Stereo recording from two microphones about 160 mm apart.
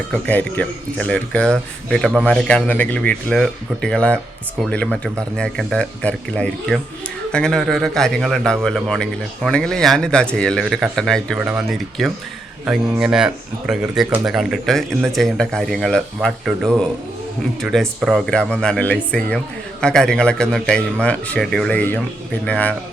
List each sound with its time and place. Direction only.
0.1 s a man's voice: 10° left (ahead or behind)